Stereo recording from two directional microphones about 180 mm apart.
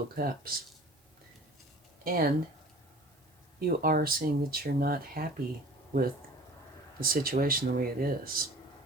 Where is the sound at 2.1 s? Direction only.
55° right (ahead or behind).